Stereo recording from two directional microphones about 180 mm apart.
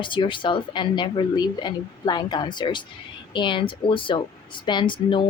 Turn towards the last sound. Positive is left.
turn(degrees=25)  # may be behind; listen again after turning